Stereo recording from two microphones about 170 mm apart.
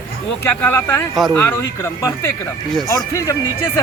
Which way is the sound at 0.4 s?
10° left (ahead or behind).